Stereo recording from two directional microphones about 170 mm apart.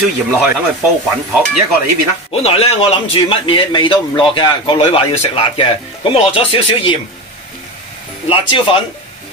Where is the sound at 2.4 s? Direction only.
35° left (ahead or behind).